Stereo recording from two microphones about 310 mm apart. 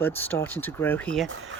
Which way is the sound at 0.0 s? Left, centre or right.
Centre.